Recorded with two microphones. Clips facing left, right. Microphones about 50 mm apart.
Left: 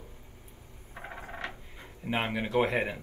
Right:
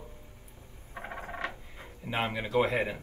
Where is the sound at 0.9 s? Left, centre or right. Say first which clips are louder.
Right 2 dB; right.